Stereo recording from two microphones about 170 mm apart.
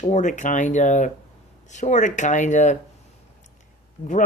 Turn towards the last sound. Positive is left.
turn(degrees=30)  # may be behind; listen again after turning